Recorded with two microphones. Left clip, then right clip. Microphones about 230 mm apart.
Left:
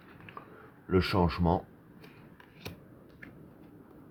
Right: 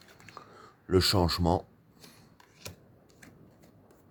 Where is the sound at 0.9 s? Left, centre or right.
Right.